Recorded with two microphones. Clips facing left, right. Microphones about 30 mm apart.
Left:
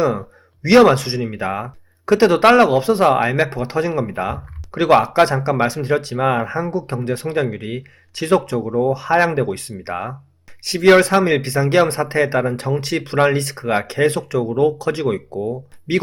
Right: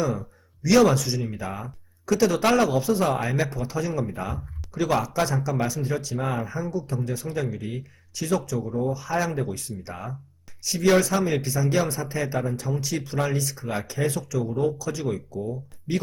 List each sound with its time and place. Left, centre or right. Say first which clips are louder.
0.0 s speech: left 8 dB; left